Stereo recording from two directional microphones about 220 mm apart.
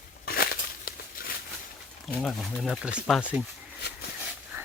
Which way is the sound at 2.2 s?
Centre (ahead or behind).